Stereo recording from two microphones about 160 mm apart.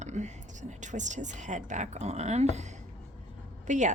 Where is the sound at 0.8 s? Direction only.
50° right (ahead or behind).